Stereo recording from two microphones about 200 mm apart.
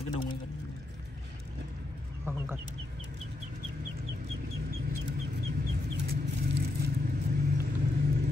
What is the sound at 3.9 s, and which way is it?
Vehicle, 50° right (ahead or behind).